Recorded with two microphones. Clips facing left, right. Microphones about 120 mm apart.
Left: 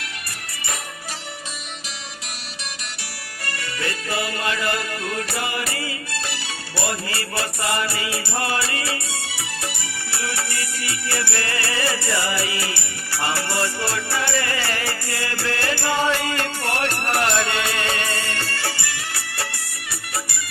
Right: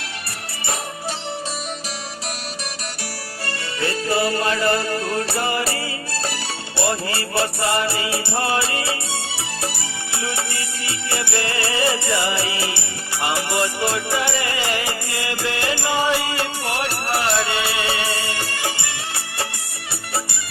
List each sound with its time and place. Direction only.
3.4 s music: 30° right (ahead or behind)
10.1 s music: 20° right (ahead or behind)